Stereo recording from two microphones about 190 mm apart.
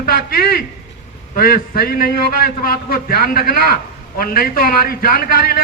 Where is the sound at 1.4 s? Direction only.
50° left (ahead or behind).